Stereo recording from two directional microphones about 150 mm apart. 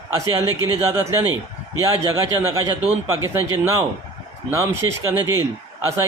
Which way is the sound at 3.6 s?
15° right (ahead or behind).